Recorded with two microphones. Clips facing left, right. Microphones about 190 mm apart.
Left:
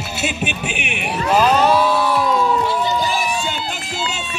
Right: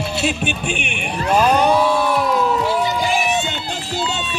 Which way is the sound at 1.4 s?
10° right (ahead or behind).